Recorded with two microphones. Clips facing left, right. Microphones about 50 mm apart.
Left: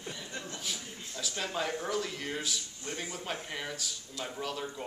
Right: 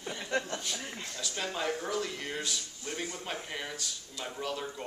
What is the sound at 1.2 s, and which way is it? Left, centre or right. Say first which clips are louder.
Speech: left 1 dB; centre.